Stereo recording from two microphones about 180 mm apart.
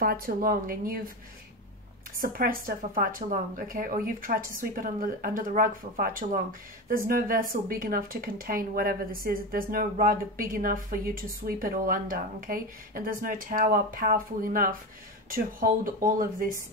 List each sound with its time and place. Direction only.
0.0 s speech: 55° right (ahead or behind)
2.1 s speech: 55° right (ahead or behind)